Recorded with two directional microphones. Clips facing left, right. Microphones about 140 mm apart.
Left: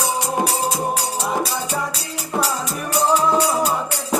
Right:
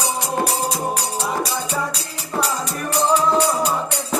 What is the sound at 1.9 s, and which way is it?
Music, centre (ahead or behind).